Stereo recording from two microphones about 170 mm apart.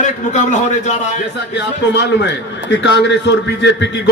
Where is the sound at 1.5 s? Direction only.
90° left.